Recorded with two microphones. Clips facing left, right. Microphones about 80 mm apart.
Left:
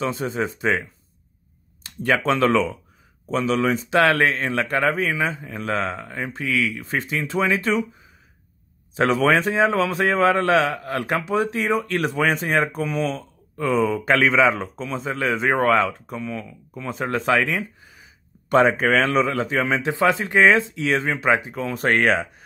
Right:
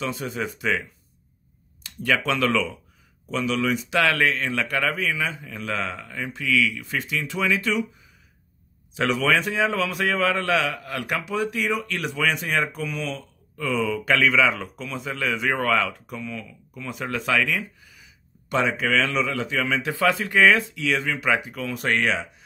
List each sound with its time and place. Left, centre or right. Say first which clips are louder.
0.0 s a man's voice: left 4 dB; left
8.9 s a man's voice: left 4 dB; left